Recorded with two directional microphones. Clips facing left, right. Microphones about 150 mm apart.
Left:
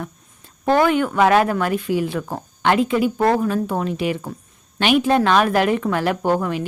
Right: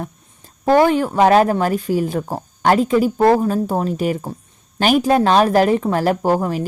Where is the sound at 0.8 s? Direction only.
35° right (ahead or behind).